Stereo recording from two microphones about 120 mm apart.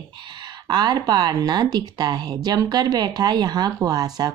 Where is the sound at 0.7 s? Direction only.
35° right (ahead or behind).